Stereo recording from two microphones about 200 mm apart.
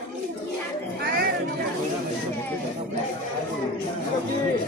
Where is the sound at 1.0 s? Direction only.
50° right (ahead or behind).